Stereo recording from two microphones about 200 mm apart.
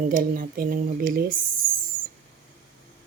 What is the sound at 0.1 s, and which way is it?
Speech, 45° right (ahead or behind).